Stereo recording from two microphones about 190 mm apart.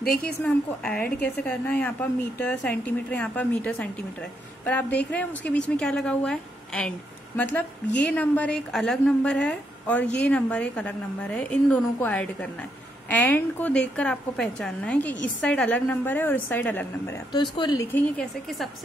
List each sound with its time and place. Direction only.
0.2 s a woman's voice: 5° left (ahead or behind)
17.9 s a woman's voice: 10° left (ahead or behind)